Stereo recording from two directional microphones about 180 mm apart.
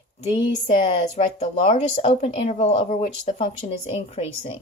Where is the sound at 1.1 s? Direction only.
40° left (ahead or behind).